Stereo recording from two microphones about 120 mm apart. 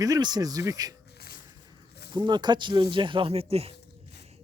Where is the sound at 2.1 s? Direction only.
40° right (ahead or behind); by 3.7 s 55° right (ahead or behind).